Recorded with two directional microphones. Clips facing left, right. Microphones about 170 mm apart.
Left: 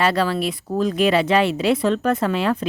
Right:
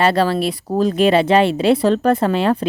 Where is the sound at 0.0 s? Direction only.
30° right (ahead or behind).